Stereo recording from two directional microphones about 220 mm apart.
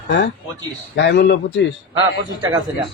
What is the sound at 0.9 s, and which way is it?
Speech, 50° left (ahead or behind).